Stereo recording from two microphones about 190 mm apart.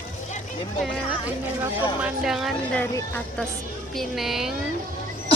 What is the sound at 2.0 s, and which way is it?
Speech, 5° right (ahead or behind).